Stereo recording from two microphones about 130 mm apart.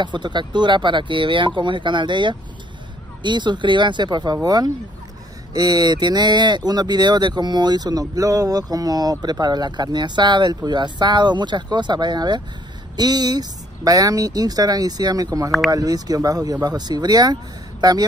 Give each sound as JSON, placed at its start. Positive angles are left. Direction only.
{"t": 0.0, "sound": "speech", "side_deg": -35}